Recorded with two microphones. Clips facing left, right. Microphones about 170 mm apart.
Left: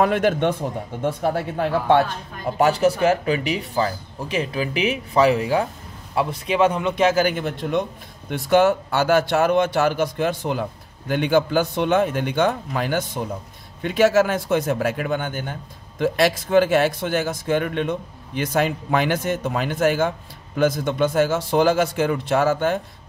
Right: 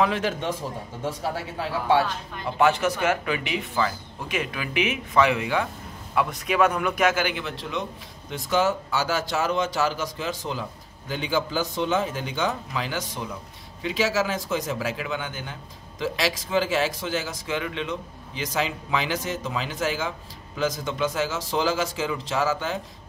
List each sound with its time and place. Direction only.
0.0 s a man's voice: 55° left (ahead or behind)
2.6 s speech: 35° left (ahead or behind); by 22.8 s 55° left (ahead or behind)